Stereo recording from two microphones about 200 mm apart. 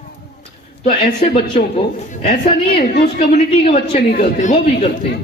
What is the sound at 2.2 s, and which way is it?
A man's voice, 30° left (ahead or behind).